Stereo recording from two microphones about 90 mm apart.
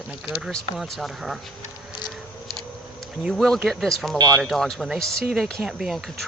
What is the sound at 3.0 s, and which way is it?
Speech, 5° left (ahead or behind).